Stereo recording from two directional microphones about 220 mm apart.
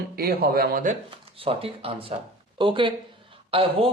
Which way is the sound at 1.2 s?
25° right (ahead or behind).